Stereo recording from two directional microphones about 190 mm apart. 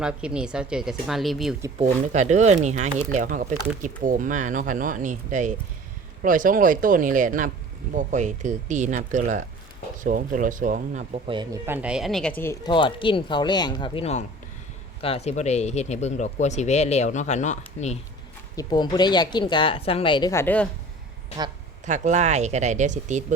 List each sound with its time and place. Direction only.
0.0 s speech: 5° right (ahead or behind)
1.8 s speech: 40° right (ahead or behind)
11.3 s speech: 25° right (ahead or behind)
11.6 s speech: 10° right (ahead or behind)
12.4 s speech: 15° left (ahead or behind)
12.7 s a woman's voice: 25° left (ahead or behind)
18.5 s a woman's voice: 20° left (ahead or behind)
21.8 s speech: 40° right (ahead or behind)